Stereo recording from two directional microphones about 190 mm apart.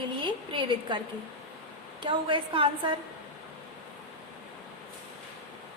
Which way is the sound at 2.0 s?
25° right (ahead or behind).